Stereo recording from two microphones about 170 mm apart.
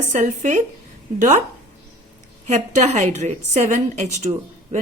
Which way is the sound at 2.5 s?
45° right (ahead or behind).